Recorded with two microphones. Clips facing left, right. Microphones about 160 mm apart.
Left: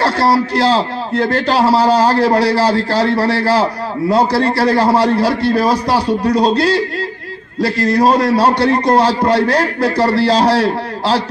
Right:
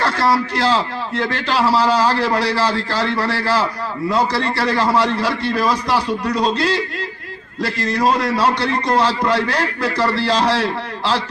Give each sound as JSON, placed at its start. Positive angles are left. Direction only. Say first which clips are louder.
{"t": 0.0, "sound": "a man's voice", "louder": "left 4 dB", "side_deg": 35}